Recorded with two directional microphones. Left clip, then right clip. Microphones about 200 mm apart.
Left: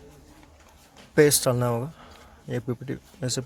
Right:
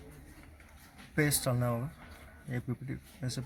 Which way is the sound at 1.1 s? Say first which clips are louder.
Left 12 dB; 55° left (ahead or behind).